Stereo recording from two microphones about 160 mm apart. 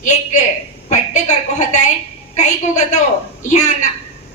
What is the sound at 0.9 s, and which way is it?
A woman's voice, 45° left (ahead or behind).